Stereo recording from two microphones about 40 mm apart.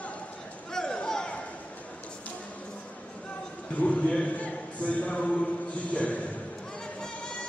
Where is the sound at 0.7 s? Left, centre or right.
Centre.